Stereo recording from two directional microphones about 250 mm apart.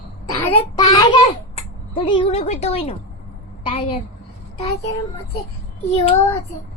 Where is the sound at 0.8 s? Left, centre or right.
Centre.